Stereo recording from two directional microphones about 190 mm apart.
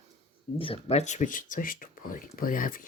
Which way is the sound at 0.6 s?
30° left (ahead or behind).